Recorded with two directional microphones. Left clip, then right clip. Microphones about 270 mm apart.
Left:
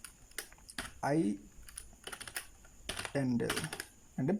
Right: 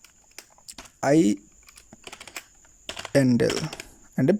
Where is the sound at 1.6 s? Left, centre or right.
Centre.